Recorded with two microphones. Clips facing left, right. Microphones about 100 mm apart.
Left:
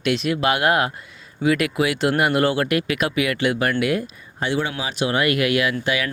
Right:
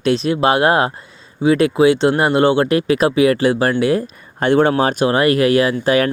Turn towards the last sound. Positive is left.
turn(degrees=-40)  # may be behind; listen again after turning